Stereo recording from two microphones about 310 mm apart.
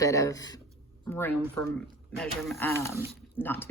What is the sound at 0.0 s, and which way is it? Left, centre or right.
Speech, centre.